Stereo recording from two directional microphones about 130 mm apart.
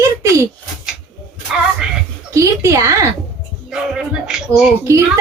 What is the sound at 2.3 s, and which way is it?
Speech, 25° right (ahead or behind).